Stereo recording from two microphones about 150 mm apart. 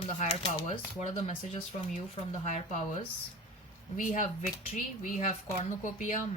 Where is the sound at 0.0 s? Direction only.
45° left (ahead or behind).